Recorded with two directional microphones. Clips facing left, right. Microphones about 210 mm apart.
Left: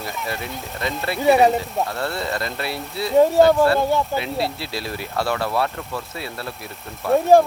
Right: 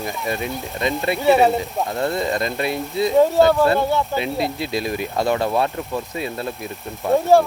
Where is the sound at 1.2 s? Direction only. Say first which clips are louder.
Even; 15° left (ahead or behind).